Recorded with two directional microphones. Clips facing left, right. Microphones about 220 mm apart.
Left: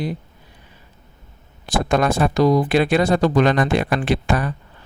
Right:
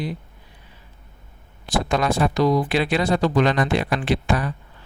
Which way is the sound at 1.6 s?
50° left (ahead or behind).